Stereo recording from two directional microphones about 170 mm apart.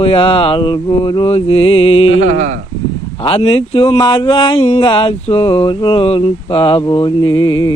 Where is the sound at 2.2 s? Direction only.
50° right (ahead or behind).